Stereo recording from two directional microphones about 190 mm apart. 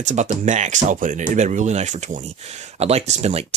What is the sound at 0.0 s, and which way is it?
Speech, 40° right (ahead or behind).